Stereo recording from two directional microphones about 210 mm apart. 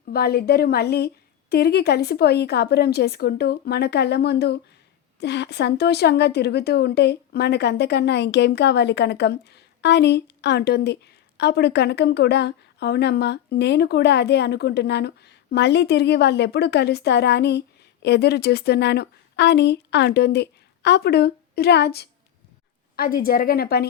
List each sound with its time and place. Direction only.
0.1 s a woman's voice: 50° left (ahead or behind)